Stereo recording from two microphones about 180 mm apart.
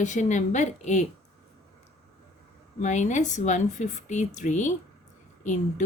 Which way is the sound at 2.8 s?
40° left (ahead or behind).